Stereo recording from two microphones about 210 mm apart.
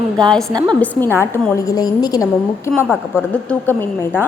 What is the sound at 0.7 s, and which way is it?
A woman's voice, 10° left (ahead or behind).